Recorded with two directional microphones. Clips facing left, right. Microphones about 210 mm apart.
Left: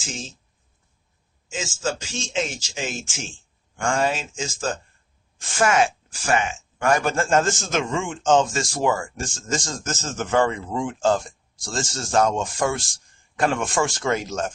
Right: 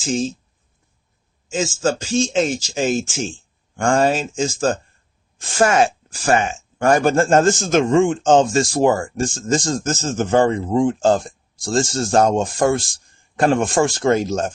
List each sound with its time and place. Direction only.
0.0 s speech: 35° right (ahead or behind)
1.5 s speech: 40° right (ahead or behind)